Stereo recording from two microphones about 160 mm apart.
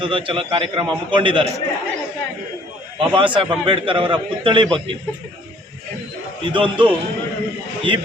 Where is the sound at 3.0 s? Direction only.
30° right (ahead or behind).